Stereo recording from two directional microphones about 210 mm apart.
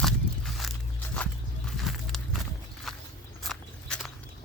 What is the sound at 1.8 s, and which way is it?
Walk, centre (ahead or behind).